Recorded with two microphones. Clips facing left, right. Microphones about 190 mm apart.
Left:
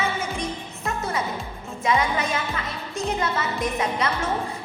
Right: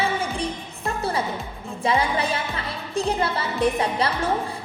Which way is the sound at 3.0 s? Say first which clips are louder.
Right 2 dB; 30° right (ahead or behind).